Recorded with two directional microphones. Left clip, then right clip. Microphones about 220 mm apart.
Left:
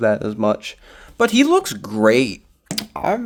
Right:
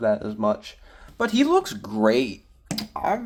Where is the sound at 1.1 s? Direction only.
30° left (ahead or behind).